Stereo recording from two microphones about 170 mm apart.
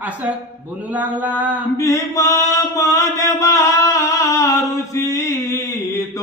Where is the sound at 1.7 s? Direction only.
20° left (ahead or behind).